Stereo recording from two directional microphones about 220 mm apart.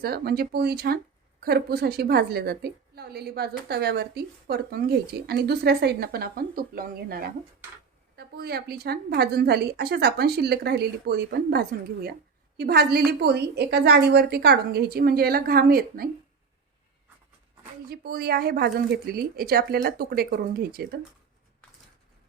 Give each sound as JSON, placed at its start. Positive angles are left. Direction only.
{"t": 0.0, "sound": "a woman's voice", "side_deg": -45}
{"t": 17.8, "sound": "a woman's voice", "side_deg": -45}